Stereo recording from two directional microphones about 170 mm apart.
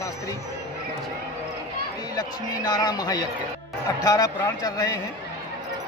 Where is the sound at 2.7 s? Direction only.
25° left (ahead or behind).